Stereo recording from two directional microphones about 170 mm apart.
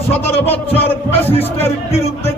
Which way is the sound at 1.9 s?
40° left (ahead or behind).